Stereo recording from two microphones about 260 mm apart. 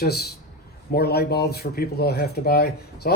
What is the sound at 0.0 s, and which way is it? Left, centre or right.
Speech, left.